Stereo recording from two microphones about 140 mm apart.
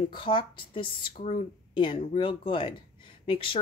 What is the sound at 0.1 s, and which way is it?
Speech, 35° left (ahead or behind).